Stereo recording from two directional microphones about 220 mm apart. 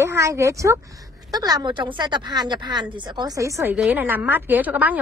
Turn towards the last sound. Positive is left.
turn(degrees=-5)  # may be behind; listen again after turning